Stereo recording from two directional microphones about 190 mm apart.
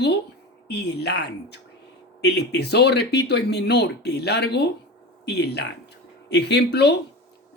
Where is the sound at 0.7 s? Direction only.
60° left (ahead or behind).